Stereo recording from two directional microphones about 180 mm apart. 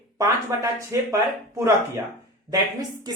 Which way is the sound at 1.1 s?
15° right (ahead or behind).